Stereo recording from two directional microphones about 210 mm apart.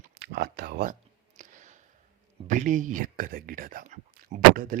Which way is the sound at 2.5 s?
35° right (ahead or behind).